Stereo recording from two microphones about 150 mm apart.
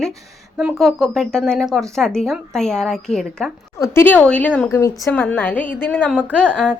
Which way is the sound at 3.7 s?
20° left (ahead or behind).